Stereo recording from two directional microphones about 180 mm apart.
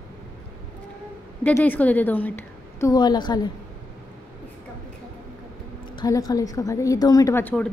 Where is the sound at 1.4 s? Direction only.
10° left (ahead or behind).